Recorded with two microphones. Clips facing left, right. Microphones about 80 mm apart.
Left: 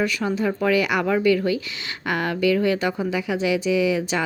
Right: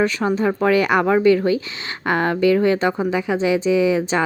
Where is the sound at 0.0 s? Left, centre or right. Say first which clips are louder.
Right 4 dB; right.